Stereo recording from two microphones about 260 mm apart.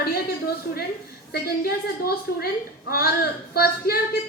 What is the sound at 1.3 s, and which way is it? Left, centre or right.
A woman's voice, left.